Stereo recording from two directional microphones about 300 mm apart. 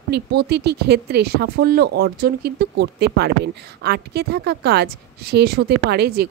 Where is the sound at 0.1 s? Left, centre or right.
Right.